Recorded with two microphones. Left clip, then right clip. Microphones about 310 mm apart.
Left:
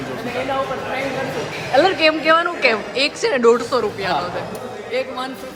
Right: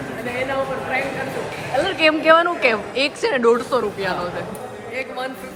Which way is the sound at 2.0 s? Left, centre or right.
Centre.